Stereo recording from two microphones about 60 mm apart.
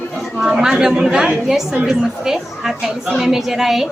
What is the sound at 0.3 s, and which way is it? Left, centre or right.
A woman's voice, centre.